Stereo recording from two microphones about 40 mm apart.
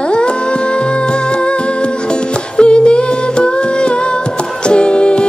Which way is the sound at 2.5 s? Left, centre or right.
Left.